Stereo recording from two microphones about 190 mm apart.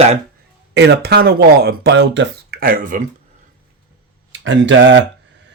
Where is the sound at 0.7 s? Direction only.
60° right (ahead or behind); by 3.0 s 45° right (ahead or behind).